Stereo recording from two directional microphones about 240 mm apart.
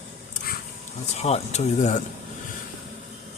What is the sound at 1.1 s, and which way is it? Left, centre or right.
Speech, left.